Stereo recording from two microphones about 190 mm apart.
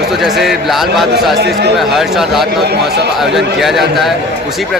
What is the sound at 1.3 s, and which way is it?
Speech, 60° right (ahead or behind).